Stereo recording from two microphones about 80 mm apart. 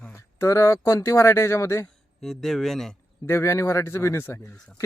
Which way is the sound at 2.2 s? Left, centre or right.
Centre.